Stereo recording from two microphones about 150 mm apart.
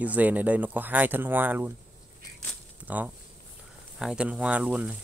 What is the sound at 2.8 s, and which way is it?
Speech, 10° right (ahead or behind).